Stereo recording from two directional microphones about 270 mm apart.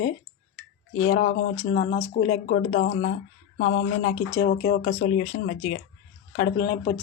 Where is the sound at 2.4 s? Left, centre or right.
Left.